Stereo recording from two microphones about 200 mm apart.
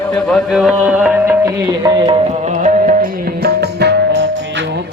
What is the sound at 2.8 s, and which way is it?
Music, 45° right (ahead or behind).